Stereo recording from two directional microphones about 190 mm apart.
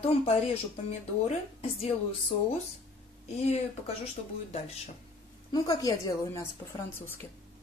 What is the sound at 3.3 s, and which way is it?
Speech, 35° left (ahead or behind).